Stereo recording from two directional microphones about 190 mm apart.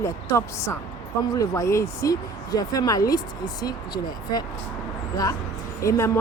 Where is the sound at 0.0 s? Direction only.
15° left (ahead or behind).